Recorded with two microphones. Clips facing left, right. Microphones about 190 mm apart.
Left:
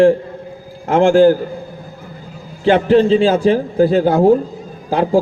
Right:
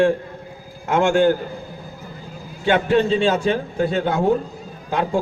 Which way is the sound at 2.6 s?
30° left (ahead or behind).